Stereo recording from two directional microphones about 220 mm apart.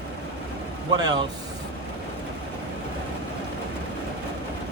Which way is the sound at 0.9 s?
20° right (ahead or behind).